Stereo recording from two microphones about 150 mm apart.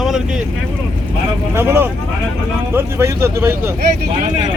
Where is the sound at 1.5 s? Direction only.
15° right (ahead or behind).